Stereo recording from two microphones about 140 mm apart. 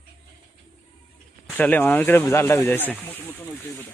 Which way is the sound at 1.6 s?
10° left (ahead or behind).